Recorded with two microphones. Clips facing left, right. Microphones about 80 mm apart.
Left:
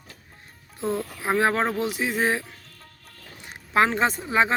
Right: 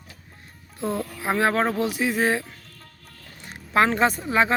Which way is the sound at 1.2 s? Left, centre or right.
Left.